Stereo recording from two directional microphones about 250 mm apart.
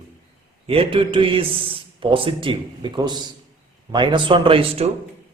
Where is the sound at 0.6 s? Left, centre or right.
Right.